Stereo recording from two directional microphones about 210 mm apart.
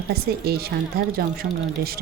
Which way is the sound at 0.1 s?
50° right (ahead or behind).